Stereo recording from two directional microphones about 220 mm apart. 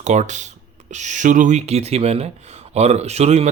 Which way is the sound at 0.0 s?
35° right (ahead or behind).